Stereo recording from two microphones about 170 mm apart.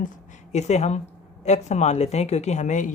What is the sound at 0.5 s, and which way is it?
Speech, 40° left (ahead or behind).